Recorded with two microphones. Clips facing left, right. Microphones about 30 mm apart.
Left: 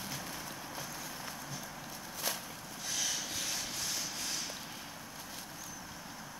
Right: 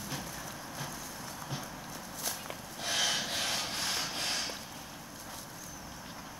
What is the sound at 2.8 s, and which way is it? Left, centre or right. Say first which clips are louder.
Sawing: right 6 dB; right.